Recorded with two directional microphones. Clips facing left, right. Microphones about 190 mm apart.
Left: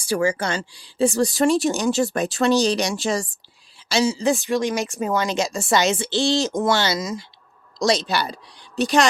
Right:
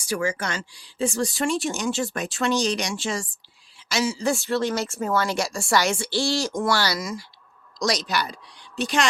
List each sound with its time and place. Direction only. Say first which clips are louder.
0.0 s speech: left 5 dB; 30° left (ahead or behind)
3.8 s speech: left 4 dB; 30° left (ahead or behind)